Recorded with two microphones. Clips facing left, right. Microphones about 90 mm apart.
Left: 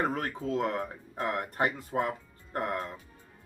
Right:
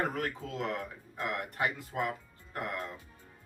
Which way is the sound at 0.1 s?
35° left (ahead or behind).